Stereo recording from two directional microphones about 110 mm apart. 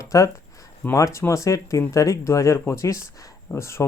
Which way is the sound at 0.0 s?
30° left (ahead or behind).